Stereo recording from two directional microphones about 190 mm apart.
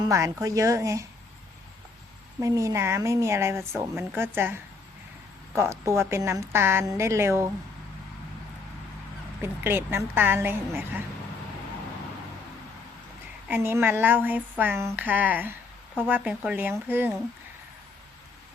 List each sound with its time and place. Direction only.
0.0 s speech: 15° right (ahead or behind)
2.4 s speech: 15° right (ahead or behind)
9.4 s speech: 10° right (ahead or behind)
13.5 s speech: 10° right (ahead or behind)